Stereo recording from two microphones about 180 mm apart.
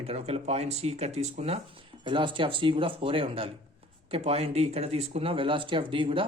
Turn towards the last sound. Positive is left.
turn(degrees=-30)  # may be behind; listen again after turning